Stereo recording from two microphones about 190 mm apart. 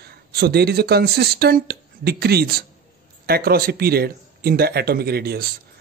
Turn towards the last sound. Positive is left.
turn(degrees=-55)  # may be behind; listen again after turning